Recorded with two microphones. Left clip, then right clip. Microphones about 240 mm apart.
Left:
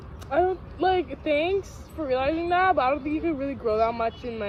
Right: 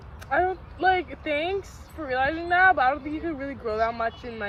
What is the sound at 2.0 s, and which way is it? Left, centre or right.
Speech, centre.